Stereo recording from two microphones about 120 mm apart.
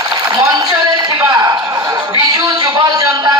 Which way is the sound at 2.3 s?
30° right (ahead or behind).